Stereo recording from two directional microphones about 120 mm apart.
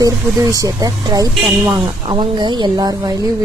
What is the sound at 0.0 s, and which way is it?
A woman's voice, 30° right (ahead or behind).